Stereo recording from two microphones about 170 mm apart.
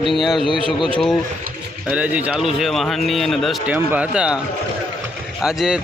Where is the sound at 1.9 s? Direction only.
5° right (ahead or behind).